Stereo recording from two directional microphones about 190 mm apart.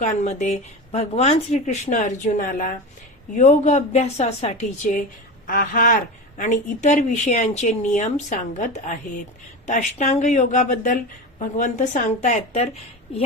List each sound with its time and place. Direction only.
0.0 s speech: 40° left (ahead or behind)
13.1 s speech: 30° left (ahead or behind)